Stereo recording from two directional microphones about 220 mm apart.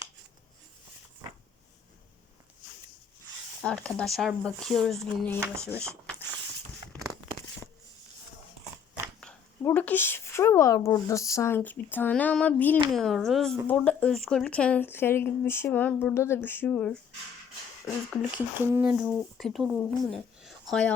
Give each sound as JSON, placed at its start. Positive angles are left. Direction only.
{"t": 3.6, "sound": "speech", "side_deg": 5}
{"t": 9.2, "sound": "speech", "side_deg": 5}